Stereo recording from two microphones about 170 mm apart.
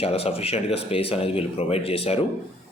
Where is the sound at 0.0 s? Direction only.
35° left (ahead or behind).